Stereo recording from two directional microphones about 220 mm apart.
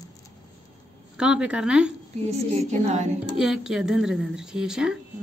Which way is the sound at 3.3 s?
5° right (ahead or behind).